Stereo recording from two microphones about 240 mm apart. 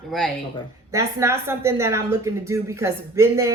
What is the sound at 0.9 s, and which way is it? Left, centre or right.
A woman's voice, centre.